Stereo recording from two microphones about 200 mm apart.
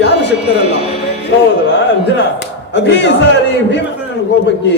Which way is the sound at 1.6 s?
60° left (ahead or behind).